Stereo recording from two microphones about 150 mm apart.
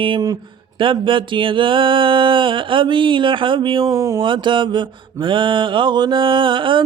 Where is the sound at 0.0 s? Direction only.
30° right (ahead or behind).